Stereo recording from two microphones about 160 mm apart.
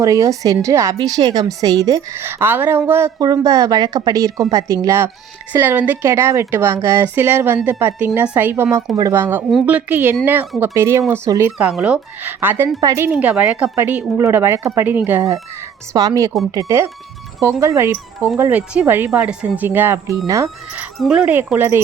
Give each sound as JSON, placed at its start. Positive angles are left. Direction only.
{"t": 0.0, "sound": "a woman's voice", "side_deg": -20}
{"t": 9.5, "sound": "a woman's voice", "side_deg": -5}
{"t": 11.5, "sound": "a woman's voice", "side_deg": -5}
{"t": 13.1, "sound": "a woman's voice", "side_deg": -10}
{"t": 15.9, "sound": "a woman's voice", "side_deg": -20}
{"t": 21.0, "sound": "a woman's voice", "side_deg": -5}